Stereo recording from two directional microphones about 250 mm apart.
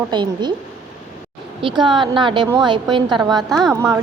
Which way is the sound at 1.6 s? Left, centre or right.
Centre.